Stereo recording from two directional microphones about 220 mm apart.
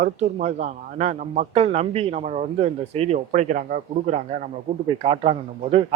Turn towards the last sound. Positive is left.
turn(degrees=-25)  # may be behind; listen again after turning